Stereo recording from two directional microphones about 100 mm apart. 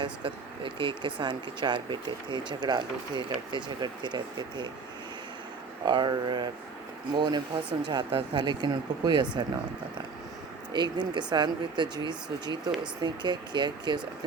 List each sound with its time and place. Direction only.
0.0 s speech: 55° right (ahead or behind)
5.8 s speech: 45° right (ahead or behind)
10.7 s speech: 50° right (ahead or behind)